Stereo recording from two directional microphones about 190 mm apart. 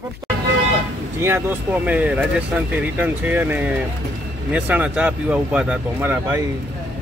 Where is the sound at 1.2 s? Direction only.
10° right (ahead or behind).